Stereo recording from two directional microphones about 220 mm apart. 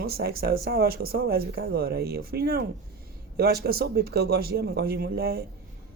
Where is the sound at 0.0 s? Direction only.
45° right (ahead or behind).